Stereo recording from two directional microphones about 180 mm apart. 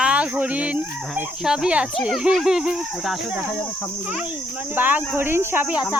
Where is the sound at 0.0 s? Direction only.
5° right (ahead or behind).